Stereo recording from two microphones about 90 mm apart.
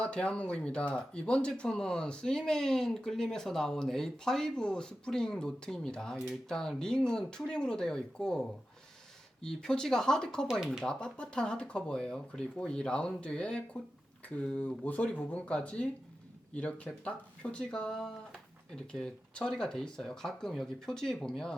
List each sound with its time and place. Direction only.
0.0 s speech: 10° left (ahead or behind)
10.5 s speech: 5° right (ahead or behind)
10.8 s speech: 10° left (ahead or behind)